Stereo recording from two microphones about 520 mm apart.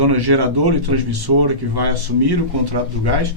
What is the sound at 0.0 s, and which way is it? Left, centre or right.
Speech, right.